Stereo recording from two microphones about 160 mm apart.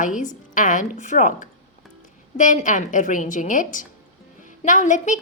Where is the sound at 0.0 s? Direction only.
55° left (ahead or behind).